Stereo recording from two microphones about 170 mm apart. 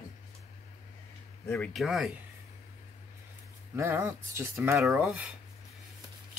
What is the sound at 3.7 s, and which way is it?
Speech, 15° right (ahead or behind).